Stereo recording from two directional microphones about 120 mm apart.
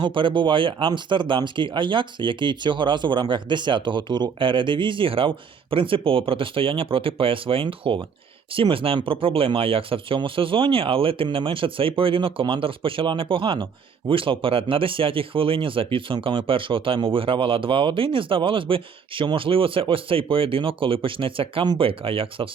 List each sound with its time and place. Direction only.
0.0 s speech: 45° right (ahead or behind)